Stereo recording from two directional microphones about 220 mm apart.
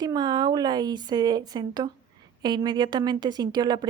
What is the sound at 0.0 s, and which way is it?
A woman's voice, 20° right (ahead or behind).